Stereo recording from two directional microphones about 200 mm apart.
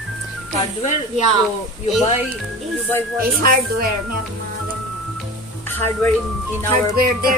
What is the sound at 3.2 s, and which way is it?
Speech, 45° right (ahead or behind).